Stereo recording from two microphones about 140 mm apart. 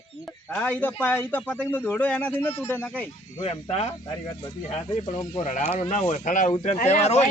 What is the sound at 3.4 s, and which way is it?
Speech, 50° left (ahead or behind).